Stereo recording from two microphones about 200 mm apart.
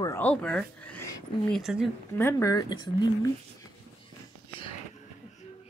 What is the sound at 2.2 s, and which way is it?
Speech, 15° left (ahead or behind).